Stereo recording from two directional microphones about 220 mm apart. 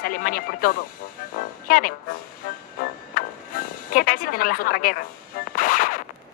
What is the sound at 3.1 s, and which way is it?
Music, 40° left (ahead or behind).